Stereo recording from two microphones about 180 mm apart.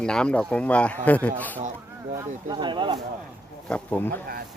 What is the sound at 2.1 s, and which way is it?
Speech, 25° right (ahead or behind).